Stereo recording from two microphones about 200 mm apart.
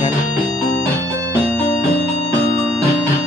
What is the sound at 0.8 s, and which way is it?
Music, 10° left (ahead or behind).